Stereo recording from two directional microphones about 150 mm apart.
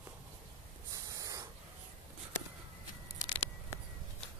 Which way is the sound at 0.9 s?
25° right (ahead or behind).